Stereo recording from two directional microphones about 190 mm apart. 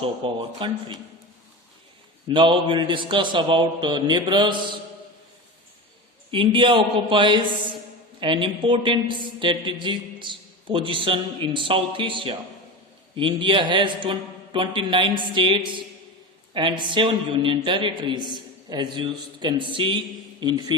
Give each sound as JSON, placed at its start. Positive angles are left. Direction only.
{"t": 0.0, "sound": "a woman's voice", "side_deg": -25}
{"t": 2.2, "sound": "a woman's voice", "side_deg": -25}
{"t": 6.3, "sound": "a woman's voice", "side_deg": -25}